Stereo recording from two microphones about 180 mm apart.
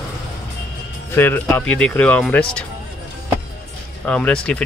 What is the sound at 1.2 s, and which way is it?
Speech, 10° left (ahead or behind).